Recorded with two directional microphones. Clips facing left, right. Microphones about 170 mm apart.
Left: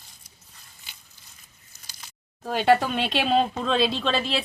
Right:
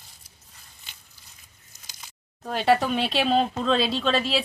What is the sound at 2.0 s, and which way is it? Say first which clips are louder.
Speech: even; centre (ahead or behind).